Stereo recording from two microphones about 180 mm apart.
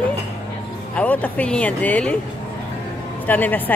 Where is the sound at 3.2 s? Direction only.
10° left (ahead or behind).